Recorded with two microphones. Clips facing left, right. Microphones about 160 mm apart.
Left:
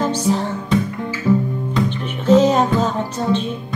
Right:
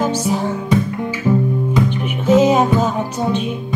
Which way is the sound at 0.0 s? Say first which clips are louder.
Right 1 dB; 10° right (ahead or behind).